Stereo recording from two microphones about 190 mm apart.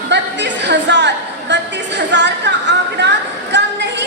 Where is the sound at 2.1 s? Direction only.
70° right (ahead or behind).